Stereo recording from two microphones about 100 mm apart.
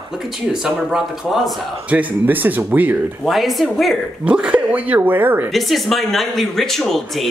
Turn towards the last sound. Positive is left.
turn(degrees=0)  # may be behind; listen again after turning